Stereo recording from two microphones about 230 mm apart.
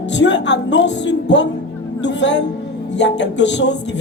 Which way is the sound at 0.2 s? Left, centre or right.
Left.